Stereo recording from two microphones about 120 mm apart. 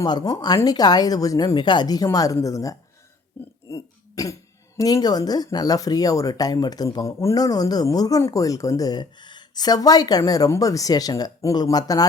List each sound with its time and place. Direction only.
0.0 s speech: 30° left (ahead or behind)
3.3 s burping: 20° left (ahead or behind)
3.7 s throat clearing: 30° left (ahead or behind)
4.8 s speech: 30° left (ahead or behind)